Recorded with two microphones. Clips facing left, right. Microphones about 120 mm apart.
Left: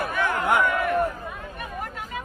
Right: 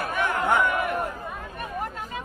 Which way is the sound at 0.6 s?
20° right (ahead or behind).